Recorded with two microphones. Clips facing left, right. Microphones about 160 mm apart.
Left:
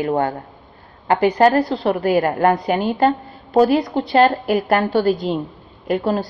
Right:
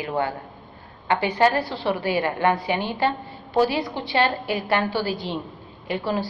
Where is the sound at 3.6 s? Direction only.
Centre (ahead or behind).